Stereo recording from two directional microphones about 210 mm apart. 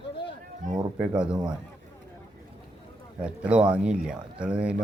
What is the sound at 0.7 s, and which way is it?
Speech, 15° right (ahead or behind).